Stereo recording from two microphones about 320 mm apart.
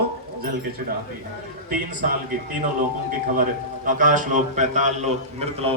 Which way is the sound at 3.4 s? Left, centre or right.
Right.